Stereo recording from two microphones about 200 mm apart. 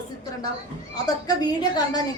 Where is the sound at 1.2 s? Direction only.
20° left (ahead or behind).